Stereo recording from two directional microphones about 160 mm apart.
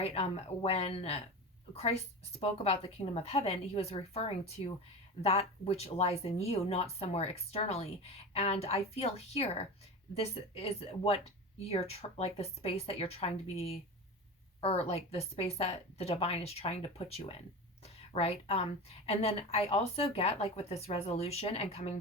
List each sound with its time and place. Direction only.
0.0 s speech: 40° left (ahead or behind)